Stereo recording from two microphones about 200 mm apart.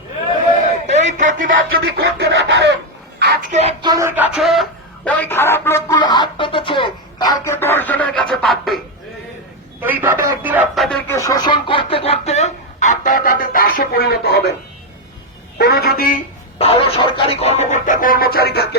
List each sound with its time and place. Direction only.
1.0 s a sound: 40° right (ahead or behind)
1.7 s speech: 60° right (ahead or behind)
3.5 s a sound: 30° right (ahead or behind); by 4.3 s 10° right (ahead or behind)
4.4 s speech: centre (ahead or behind)
9.8 s speech: 10° right (ahead or behind)
11.1 s chicken: 15° left (ahead or behind); by 14.5 s 50° left (ahead or behind)
15.5 s a woman's voice: 50° left (ahead or behind)
16.6 s chicken: 30° left (ahead or behind); by 18.8 s 50° left (ahead or behind)